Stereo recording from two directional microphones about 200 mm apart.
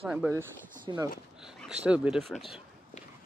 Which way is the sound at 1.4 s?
5° right (ahead or behind).